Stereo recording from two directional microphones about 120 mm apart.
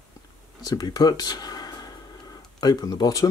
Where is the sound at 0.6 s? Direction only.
35° left (ahead or behind).